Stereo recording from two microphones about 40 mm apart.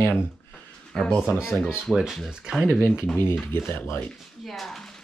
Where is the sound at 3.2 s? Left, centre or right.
Left.